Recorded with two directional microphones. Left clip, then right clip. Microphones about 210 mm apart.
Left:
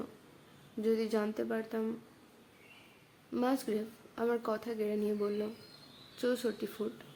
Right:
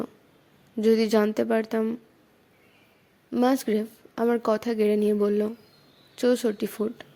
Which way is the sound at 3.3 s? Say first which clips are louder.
Right 10 dB; 45° right (ahead or behind).